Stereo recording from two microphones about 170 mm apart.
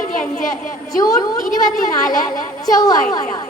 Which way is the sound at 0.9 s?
20° left (ahead or behind).